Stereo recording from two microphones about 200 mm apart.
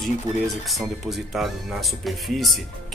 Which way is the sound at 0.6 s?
Centre (ahead or behind).